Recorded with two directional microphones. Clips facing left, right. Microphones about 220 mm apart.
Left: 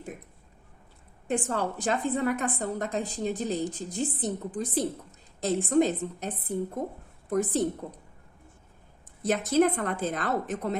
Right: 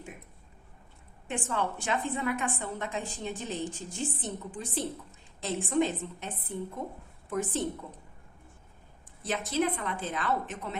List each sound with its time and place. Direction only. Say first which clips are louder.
1.3 s a woman's voice: left 4 dB; 40° left (ahead or behind)
9.2 s a woman's voice: left 7 dB; 45° left (ahead or behind)